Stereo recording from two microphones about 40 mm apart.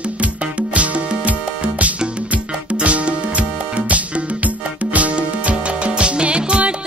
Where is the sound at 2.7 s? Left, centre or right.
Right.